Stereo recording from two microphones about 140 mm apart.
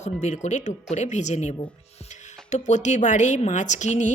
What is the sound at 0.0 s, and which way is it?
Speech, 55° left (ahead or behind).